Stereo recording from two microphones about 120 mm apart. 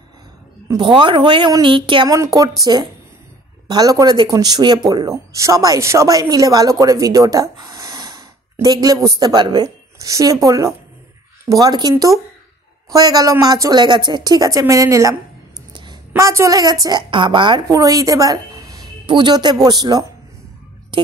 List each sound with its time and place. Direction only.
0.7 s speech: 40° right (ahead or behind)
2.0 s a woman's voice: 25° right (ahead or behind)
12.9 s speech: 30° right (ahead or behind)
15.7 s a sound: 40° right (ahead or behind)
16.2 s a woman's voice: 25° right (ahead or behind)
17.7 s a woman's voice: 30° right (ahead or behind)